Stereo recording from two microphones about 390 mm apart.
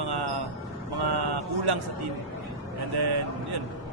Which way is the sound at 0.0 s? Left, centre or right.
Right.